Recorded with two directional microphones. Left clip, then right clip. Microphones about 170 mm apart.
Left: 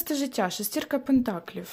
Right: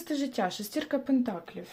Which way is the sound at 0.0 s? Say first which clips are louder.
Left 3 dB; 30° left (ahead or behind).